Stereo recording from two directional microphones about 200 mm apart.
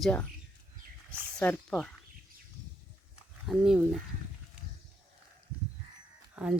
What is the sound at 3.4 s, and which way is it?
Speech, centre (ahead or behind).